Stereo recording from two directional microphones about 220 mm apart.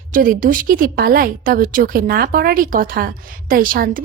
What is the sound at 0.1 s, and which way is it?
A woman's voice, 40° right (ahead or behind).